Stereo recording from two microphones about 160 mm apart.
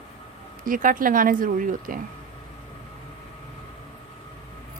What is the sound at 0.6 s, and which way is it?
A woman's voice, 60° right (ahead or behind).